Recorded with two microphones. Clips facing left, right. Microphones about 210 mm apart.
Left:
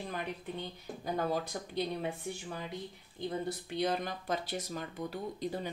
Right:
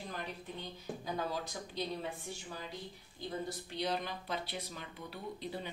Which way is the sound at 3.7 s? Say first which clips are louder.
Left 4 dB; 50° left (ahead or behind).